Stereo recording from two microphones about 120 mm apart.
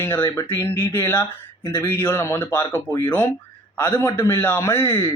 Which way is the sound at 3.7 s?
20° left (ahead or behind).